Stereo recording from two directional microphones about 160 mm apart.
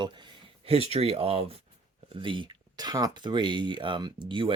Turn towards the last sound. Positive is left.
turn(degrees=-30)  # may be behind; listen again after turning